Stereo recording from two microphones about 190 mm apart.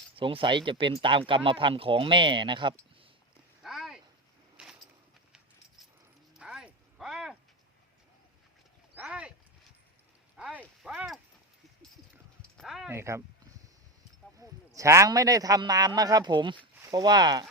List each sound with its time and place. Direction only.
0.2 s speech: 25° right (ahead or behind)
3.6 s a sound: centre (ahead or behind)
6.4 s a sound: 5° right (ahead or behind)
9.0 s clip-clop: 5° right (ahead or behind)
10.3 s clip-clop: 5° right (ahead or behind)
12.4 s dog: centre (ahead or behind)
12.9 s speech: 15° right (ahead or behind)
14.3 s speech: 15° right (ahead or behind)